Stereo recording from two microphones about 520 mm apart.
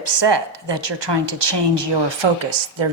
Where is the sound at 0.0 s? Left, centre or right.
Right.